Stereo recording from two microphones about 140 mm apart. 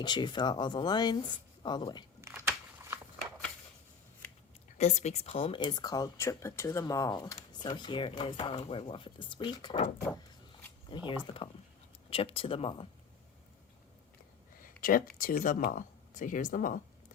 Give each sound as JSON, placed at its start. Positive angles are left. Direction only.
{"t": 0.0, "sound": "speech", "side_deg": 30}
{"t": 2.2, "sound": "a sound", "side_deg": -15}
{"t": 4.8, "sound": "speech", "side_deg": 55}
{"t": 10.8, "sound": "speech", "side_deg": 35}
{"t": 14.6, "sound": "a sound", "side_deg": 85}
{"t": 15.2, "sound": "speech", "side_deg": 75}